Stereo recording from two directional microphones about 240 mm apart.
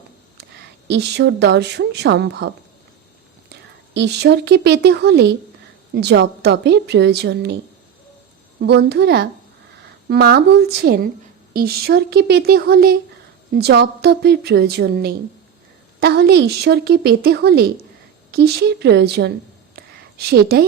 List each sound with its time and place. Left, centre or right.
0.9 s a woman's voice: right
3.9 s a woman's voice: right
8.6 s a woman's voice: right
19.7 s a sound: right